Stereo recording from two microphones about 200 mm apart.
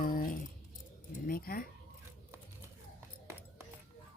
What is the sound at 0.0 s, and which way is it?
Keys jangling, 45° left (ahead or behind).